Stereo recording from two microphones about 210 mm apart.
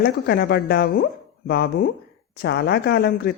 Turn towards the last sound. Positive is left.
turn(degrees=50)  # may be behind; listen again after turning